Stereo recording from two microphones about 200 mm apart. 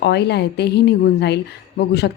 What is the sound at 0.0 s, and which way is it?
Speech, 55° left (ahead or behind).